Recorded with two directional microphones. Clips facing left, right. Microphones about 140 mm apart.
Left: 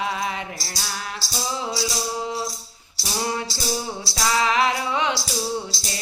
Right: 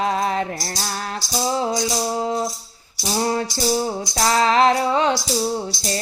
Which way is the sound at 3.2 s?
40° right (ahead or behind).